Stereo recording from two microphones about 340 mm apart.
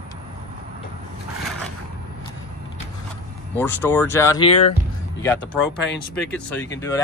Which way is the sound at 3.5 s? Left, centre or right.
Centre.